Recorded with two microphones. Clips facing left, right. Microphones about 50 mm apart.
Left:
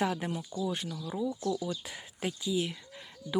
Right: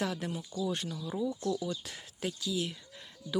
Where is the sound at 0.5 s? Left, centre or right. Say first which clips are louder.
Even; centre.